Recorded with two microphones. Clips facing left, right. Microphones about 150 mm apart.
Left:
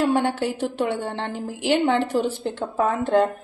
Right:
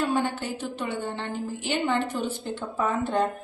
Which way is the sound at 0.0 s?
75° left (ahead or behind).